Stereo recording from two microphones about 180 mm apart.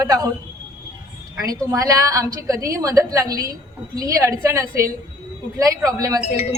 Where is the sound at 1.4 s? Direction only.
20° right (ahead or behind).